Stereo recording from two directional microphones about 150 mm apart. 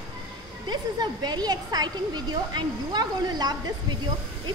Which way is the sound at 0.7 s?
30° right (ahead or behind).